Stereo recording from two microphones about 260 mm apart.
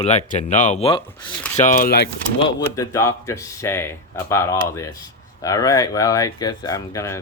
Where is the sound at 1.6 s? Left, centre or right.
Left.